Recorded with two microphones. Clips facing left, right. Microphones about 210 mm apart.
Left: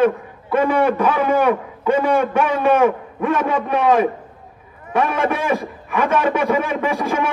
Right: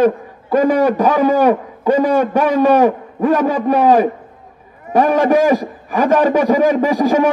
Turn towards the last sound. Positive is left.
turn(degrees=-35)  # may be behind; listen again after turning